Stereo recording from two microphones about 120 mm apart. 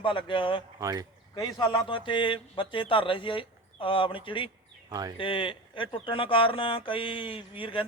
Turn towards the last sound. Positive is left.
turn(degrees=45)  # may be behind; listen again after turning